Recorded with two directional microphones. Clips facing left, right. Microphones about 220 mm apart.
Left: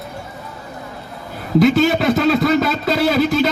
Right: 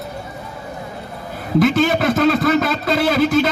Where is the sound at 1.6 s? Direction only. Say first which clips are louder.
Left 2 dB; 50° right (ahead or behind).